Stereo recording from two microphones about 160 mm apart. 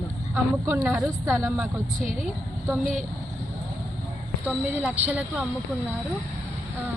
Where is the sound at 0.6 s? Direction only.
10° right (ahead or behind).